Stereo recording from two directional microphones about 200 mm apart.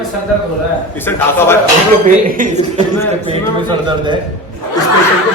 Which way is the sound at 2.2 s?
40° right (ahead or behind).